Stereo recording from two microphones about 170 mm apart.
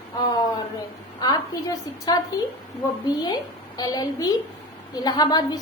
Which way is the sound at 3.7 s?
25° left (ahead or behind).